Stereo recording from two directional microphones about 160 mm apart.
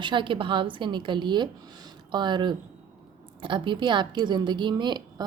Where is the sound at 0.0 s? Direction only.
30° right (ahead or behind).